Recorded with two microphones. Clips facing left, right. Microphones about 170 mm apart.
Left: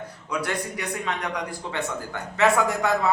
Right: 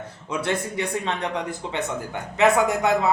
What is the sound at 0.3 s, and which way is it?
Speech, 25° right (ahead or behind).